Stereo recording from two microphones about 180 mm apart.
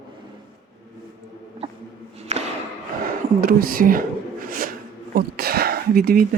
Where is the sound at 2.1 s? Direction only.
35° right (ahead or behind).